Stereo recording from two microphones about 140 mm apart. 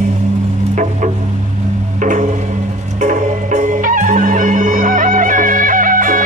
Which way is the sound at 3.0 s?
65° right (ahead or behind).